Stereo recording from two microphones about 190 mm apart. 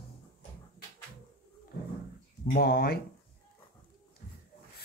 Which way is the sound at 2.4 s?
50° left (ahead or behind).